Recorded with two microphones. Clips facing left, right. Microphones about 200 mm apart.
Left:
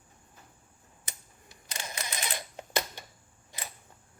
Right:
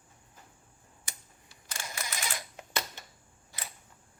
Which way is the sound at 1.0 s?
20° left (ahead or behind).